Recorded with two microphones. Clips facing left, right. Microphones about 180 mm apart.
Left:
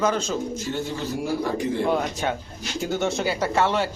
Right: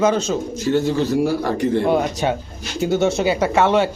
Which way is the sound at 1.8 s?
15° right (ahead or behind).